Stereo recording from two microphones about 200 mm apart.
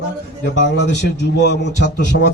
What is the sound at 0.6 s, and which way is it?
A man's voice, 60° left (ahead or behind).